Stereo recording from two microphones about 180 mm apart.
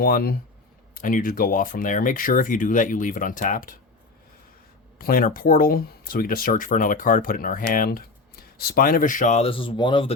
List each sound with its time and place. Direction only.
0.0 s speech: 55° left (ahead or behind)
4.9 s speech: 55° left (ahead or behind); by 10.2 s 30° left (ahead or behind)